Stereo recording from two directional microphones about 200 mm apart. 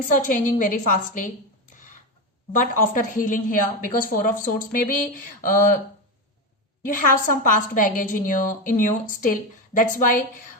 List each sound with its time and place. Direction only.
0.3 s a woman's voice: 40° left (ahead or behind)
2.5 s a woman's voice: 40° left (ahead or behind)
6.8 s a woman's voice: 40° left (ahead or behind)